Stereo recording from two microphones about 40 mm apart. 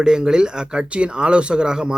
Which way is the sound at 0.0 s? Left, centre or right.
Centre.